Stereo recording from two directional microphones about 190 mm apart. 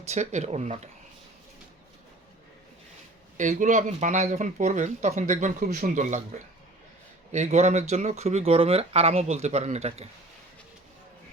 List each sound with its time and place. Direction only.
0.1 s speech: 40° right (ahead or behind)
3.3 s speech: 40° right (ahead or behind)
7.3 s speech: 35° right (ahead or behind)